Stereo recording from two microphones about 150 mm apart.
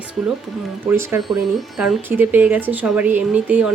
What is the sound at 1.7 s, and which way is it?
Speech, centre (ahead or behind).